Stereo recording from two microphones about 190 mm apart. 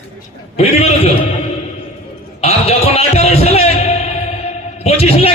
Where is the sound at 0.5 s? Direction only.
35° left (ahead or behind).